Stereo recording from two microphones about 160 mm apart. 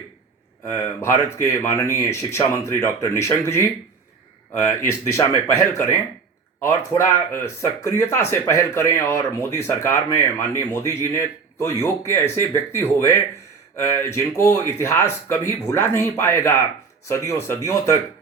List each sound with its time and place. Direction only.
0.7 s speech: 15° left (ahead or behind)
4.6 s speech: 15° left (ahead or behind)